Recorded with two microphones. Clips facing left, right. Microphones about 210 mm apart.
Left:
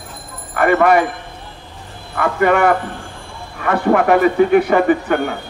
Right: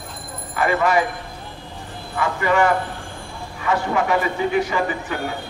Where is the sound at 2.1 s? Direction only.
60° left (ahead or behind).